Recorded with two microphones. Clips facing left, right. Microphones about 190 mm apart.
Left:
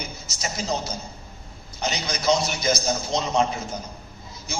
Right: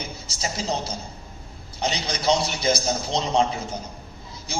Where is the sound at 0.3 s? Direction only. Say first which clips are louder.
Even; 30° right (ahead or behind).